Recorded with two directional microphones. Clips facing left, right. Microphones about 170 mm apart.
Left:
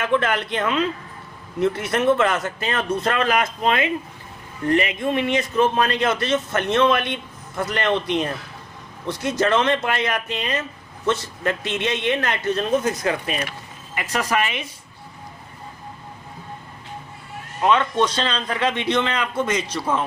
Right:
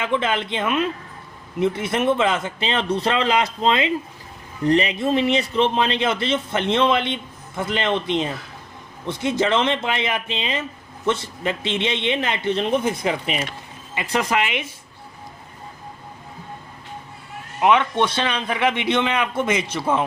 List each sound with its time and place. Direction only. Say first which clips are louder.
0.1 s a man's voice: left 1 dB; 15° right (ahead or behind)
9.4 s speech: left 2 dB; 20° right (ahead or behind)
17.6 s a man's voice: right 1 dB; 15° right (ahead or behind)